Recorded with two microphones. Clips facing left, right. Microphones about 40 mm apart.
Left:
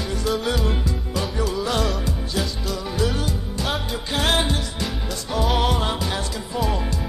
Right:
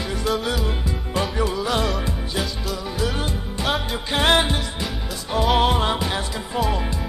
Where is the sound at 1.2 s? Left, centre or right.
Right.